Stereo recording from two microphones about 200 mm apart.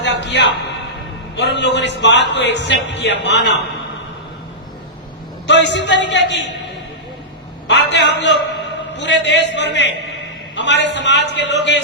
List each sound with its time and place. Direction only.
0.0 s a sound: 60° left (ahead or behind)
1.4 s speech: 60° left (ahead or behind)
5.5 s speech: 60° left (ahead or behind)
7.7 s a man's voice: 60° left (ahead or behind)